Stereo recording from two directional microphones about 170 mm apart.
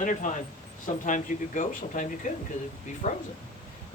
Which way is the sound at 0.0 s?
50° left (ahead or behind).